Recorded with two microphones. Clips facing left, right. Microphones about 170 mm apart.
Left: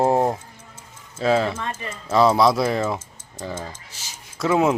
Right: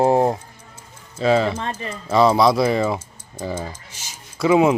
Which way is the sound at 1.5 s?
25° right (ahead or behind).